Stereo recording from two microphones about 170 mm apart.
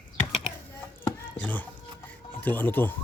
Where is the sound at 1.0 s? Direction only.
10° left (ahead or behind).